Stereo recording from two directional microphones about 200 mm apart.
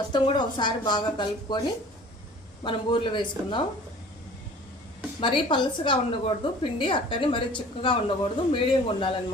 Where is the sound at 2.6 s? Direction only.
25° left (ahead or behind).